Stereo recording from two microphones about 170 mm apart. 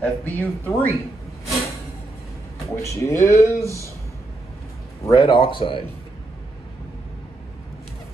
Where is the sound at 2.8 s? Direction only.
15° left (ahead or behind).